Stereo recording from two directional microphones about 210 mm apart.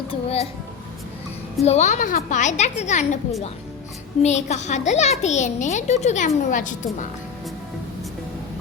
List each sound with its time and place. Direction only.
0.1 s speech: 30° left (ahead or behind)
1.6 s a child's voice: 35° left (ahead or behind)
4.2 s a child's voice: 35° left (ahead or behind)